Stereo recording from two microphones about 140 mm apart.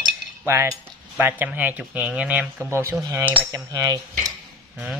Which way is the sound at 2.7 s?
20° right (ahead or behind).